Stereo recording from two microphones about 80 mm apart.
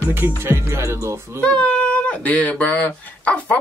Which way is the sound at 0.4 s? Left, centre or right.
Right.